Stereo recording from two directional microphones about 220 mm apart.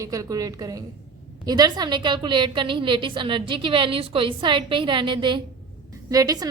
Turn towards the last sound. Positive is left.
turn(degrees=-15)  # may be behind; listen again after turning